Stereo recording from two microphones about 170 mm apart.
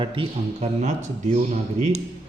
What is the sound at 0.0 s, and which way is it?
A man's voice, 30° right (ahead or behind).